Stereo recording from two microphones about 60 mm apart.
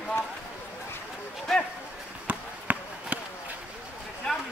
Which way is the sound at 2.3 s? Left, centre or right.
Right.